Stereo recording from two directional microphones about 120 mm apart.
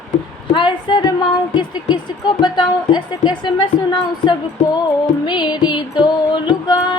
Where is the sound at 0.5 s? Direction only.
40° left (ahead or behind).